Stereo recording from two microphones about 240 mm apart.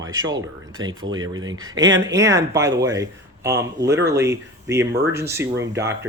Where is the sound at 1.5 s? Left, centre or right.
Right.